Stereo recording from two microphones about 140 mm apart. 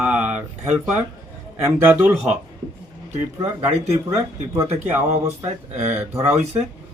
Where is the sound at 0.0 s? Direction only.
10° right (ahead or behind).